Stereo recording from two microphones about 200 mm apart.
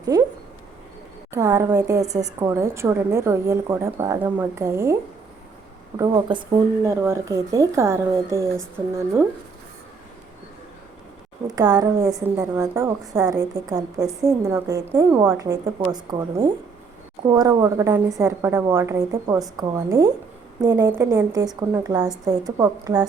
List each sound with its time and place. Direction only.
0.1 s speech: 20° right (ahead or behind)
1.3 s a woman's voice: 15° right (ahead or behind)
6.0 s a woman's voice: 20° right (ahead or behind)
11.4 s a woman's voice: 20° right (ahead or behind)